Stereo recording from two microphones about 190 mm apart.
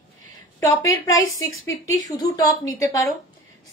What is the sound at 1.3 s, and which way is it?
A woman's voice, 15° left (ahead or behind).